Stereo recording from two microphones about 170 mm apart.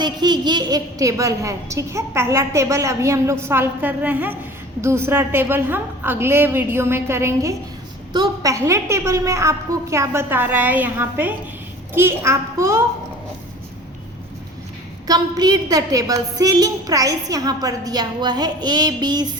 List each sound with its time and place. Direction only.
0.0 s a woman's voice: 25° right (ahead or behind)
15.0 s a woman's voice: 25° right (ahead or behind)